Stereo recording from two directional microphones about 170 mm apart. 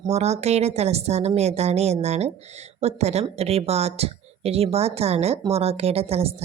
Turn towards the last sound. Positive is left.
turn(degrees=-35)  # may be behind; listen again after turning